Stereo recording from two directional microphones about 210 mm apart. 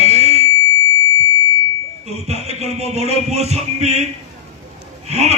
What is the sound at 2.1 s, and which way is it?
Music, 30° right (ahead or behind).